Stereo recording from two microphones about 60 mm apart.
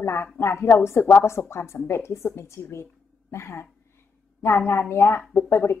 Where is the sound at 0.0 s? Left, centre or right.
Left.